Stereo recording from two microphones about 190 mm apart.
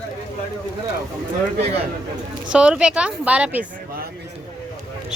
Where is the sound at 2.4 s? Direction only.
5° right (ahead or behind).